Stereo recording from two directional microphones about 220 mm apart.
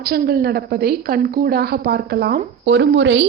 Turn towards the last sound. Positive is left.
turn(degrees=-55)  # may be behind; listen again after turning